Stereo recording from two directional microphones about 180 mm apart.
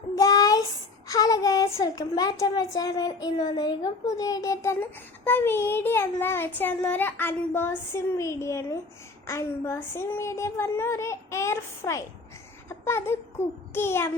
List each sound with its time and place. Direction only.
0.2 s child singing: 20° left (ahead or behind)
1.8 s a child's voice: 20° left (ahead or behind)
12.6 s a sound: 15° left (ahead or behind)
13.7 s a child's voice: 15° left (ahead or behind)